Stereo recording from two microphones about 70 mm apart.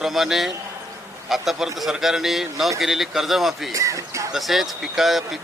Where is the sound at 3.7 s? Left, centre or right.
Right.